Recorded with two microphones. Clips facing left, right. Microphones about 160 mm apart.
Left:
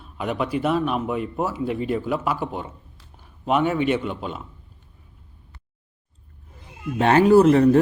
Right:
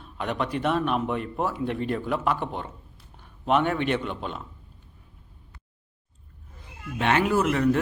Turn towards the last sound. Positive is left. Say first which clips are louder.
# left 9 dB
turn(degrees=35)  # may be behind; listen again after turning